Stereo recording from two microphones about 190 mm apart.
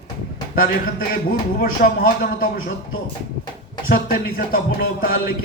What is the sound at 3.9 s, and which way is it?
Speech, 50° left (ahead or behind).